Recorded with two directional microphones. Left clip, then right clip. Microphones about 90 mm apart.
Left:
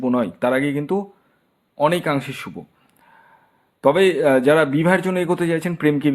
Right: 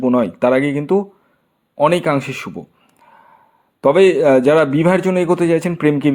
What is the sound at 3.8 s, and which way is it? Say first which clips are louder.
Speech: right 4 dB; 35° right (ahead or behind).